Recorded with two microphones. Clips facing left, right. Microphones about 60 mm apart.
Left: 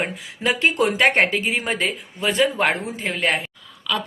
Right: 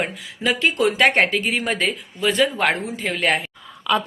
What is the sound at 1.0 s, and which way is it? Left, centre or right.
Speech, centre.